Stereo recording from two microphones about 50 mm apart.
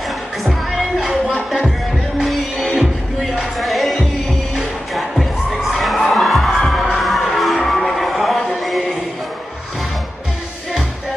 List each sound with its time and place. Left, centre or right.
0.4 s music: centre
1.0 s a sound: right
2.1 s music: centre
4.6 s children shouting: centre
6.9 s music: centre
8.5 s a sound: centre